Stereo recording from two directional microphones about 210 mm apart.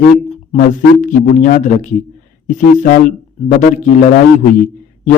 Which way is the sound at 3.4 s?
35° left (ahead or behind).